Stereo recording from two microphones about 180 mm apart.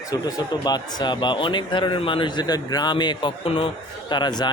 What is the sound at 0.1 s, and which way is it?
Speech, 20° left (ahead or behind).